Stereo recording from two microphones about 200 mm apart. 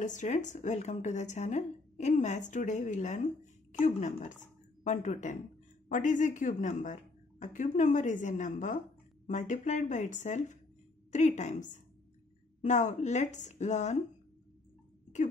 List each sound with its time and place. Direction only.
0.0 s a woman's voice: 40° left (ahead or behind)